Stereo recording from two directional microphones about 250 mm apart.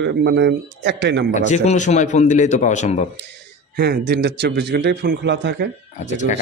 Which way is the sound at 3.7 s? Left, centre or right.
Right.